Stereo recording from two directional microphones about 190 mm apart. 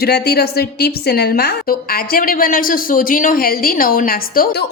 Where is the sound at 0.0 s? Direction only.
55° left (ahead or behind).